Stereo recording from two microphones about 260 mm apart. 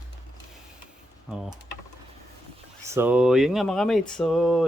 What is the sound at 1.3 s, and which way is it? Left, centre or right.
Speech, centre.